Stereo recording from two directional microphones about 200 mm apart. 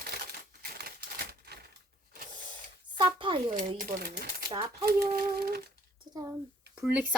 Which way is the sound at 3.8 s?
45° right (ahead or behind).